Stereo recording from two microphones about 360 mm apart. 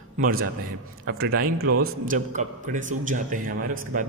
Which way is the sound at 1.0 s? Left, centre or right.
Right.